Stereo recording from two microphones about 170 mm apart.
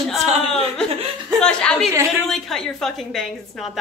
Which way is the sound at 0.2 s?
40° right (ahead or behind).